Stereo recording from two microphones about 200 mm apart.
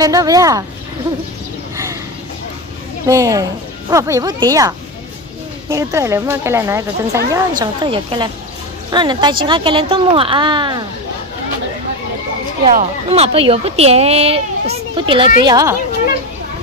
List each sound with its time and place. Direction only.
0.0 s a woman's voice: 15° right (ahead or behind)
3.1 s a woman's voice: 15° right (ahead or behind)
12.6 s a woman's voice: 30° right (ahead or behind)